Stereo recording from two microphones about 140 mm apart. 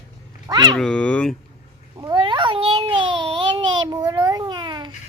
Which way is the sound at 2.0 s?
30° right (ahead or behind).